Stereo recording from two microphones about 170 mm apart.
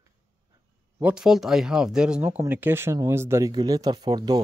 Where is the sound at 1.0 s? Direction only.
5° right (ahead or behind).